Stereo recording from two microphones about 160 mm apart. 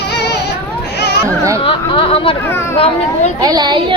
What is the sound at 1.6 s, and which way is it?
Speech, 35° left (ahead or behind).